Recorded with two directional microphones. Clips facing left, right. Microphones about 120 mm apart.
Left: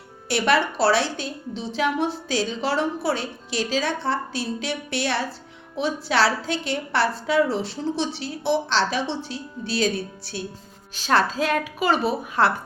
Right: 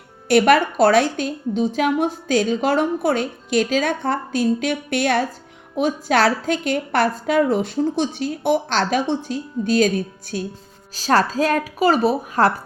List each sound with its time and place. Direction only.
0.3 s a woman's voice: 50° right (ahead or behind)